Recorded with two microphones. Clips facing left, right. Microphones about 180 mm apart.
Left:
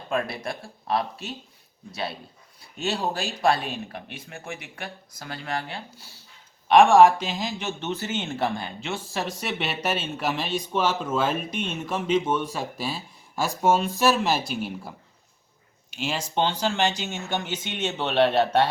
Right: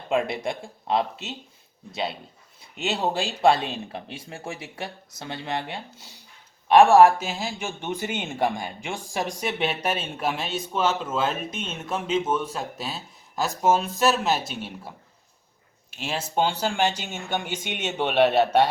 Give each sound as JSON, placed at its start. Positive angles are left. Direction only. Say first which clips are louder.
{"t": 0.1, "sound": "speech", "louder": "right 3 dB", "side_deg": -20}
{"t": 6.7, "sound": "speech", "louder": "right 1 dB", "side_deg": -5}
{"t": 10.8, "sound": "speech", "louder": "even", "side_deg": 10}
{"t": 12.0, "sound": "speech", "louder": "left 1 dB", "side_deg": -5}
{"t": 16.0, "sound": "speech", "louder": "right 1 dB", "side_deg": -5}